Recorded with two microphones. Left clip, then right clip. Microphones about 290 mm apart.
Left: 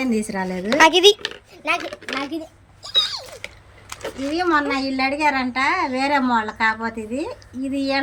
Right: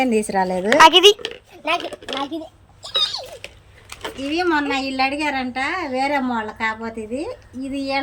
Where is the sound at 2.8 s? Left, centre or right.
Left.